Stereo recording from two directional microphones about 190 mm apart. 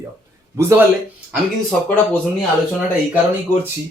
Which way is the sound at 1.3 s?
5° left (ahead or behind).